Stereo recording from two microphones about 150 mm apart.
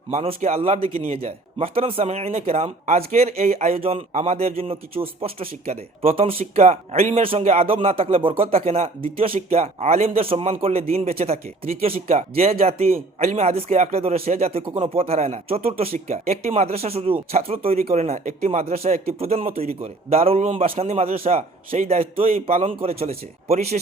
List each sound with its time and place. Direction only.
0.1 s speech: 45° right (ahead or behind)
19.5 s a man's voice: 75° right (ahead or behind)
19.8 s speech: 40° right (ahead or behind)